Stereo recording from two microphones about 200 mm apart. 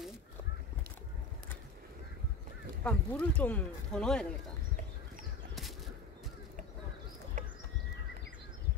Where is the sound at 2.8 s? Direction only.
5° left (ahead or behind).